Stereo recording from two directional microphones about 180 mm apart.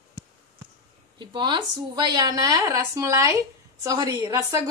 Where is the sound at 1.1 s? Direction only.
25° right (ahead or behind).